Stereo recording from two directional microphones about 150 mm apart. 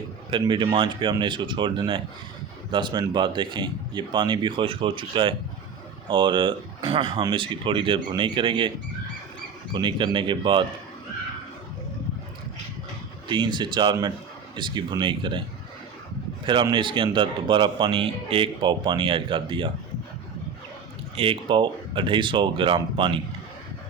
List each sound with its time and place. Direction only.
0.3 s speech: 35° right (ahead or behind)
9.7 s speech: 30° right (ahead or behind)
13.2 s speech: 30° right (ahead or behind)
16.7 s speech: 35° right (ahead or behind)
21.2 s speech: 35° right (ahead or behind)